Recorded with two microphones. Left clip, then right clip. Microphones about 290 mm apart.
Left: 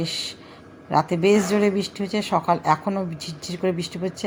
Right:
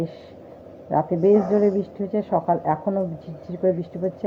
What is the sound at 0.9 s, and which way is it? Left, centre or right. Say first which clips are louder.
Speech: right 1 dB; centre.